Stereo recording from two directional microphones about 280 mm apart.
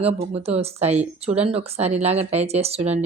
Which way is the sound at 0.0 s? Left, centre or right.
Right.